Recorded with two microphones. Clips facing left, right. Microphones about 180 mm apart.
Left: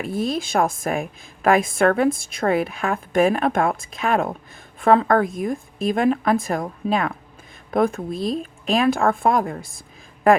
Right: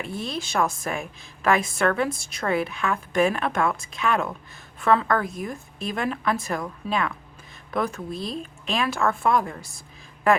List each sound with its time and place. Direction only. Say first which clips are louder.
0.1 s a woman's voice: left 10 dB; 50° left (ahead or behind)
8.1 s speech: left 7 dB; centre (ahead or behind)
8.4 s a woman's voice: left 5 dB; 45° left (ahead or behind)